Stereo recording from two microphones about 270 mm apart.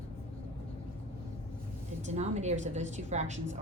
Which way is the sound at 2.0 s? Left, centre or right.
Right.